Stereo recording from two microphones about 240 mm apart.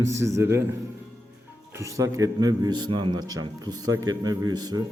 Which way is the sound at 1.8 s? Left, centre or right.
Centre.